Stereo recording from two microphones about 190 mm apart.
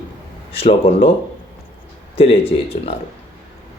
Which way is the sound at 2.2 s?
30° left (ahead or behind).